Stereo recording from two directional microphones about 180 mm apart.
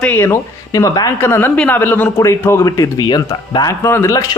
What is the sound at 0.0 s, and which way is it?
Speech, 10° left (ahead or behind).